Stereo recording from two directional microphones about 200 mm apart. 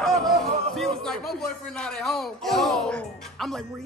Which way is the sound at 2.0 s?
Centre (ahead or behind).